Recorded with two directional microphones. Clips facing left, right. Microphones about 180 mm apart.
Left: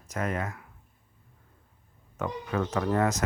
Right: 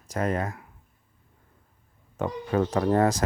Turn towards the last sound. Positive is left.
turn(degrees=-35)  # may be behind; listen again after turning